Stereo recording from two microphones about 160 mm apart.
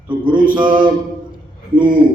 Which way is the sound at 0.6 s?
30° right (ahead or behind).